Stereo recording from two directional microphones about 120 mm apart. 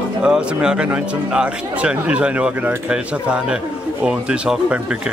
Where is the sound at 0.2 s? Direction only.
5° right (ahead or behind).